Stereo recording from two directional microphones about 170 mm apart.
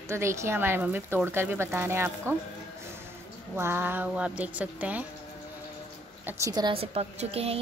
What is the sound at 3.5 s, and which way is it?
A woman's voice, 15° right (ahead or behind).